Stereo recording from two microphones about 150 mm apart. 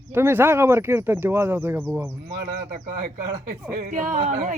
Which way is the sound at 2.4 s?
65° right (ahead or behind).